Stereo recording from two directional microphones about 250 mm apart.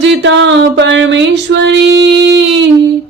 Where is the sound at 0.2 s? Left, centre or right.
Right.